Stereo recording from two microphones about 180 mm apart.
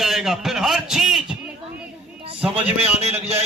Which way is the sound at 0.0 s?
Centre (ahead or behind).